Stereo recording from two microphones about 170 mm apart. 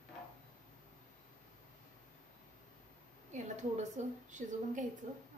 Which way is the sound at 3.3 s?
45° right (ahead or behind).